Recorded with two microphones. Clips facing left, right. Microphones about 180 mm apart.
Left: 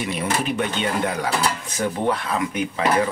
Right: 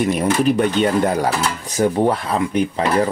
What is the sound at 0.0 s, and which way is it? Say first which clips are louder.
Speech: right 8 dB; 40° right (ahead or behind).